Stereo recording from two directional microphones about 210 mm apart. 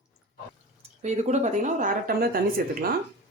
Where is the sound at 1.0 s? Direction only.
35° right (ahead or behind).